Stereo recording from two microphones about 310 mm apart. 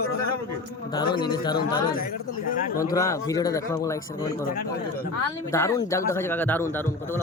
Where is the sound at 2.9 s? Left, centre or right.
Centre.